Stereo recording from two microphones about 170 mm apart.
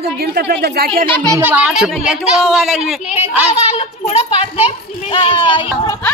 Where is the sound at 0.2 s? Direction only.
70° right (ahead or behind).